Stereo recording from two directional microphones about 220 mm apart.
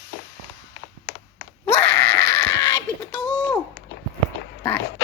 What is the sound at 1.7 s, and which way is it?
Screaming, 10° left (ahead or behind).